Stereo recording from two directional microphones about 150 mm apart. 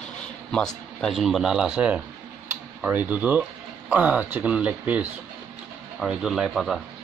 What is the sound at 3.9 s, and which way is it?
Speech, 10° right (ahead or behind).